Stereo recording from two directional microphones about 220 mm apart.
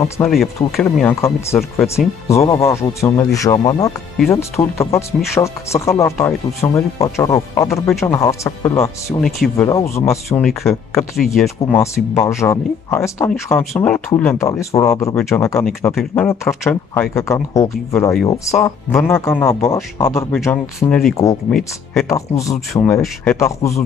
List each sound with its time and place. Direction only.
0.2 s speech: 10° left (ahead or behind)
1.6 s speech: centre (ahead or behind)
2.2 s speech: 15° left (ahead or behind)
9.2 s speech: centre (ahead or behind)
9.7 s speech: 15° left (ahead or behind)
10.4 s speech: centre (ahead or behind)
10.7 s speech: 10° left (ahead or behind)
11.1 s speech: centre (ahead or behind)
11.6 s speech: 15° left (ahead or behind)
15.9 s speech: centre (ahead or behind)
16.3 s speech: 10° left (ahead or behind)